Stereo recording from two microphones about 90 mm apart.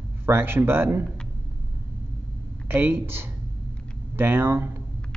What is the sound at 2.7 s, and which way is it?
Speech, 25° right (ahead or behind).